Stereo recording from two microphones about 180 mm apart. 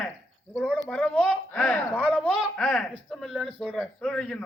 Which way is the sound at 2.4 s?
Centre (ahead or behind).